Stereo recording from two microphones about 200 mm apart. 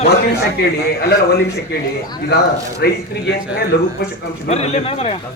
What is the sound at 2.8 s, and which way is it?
Speech, 55° left (ahead or behind).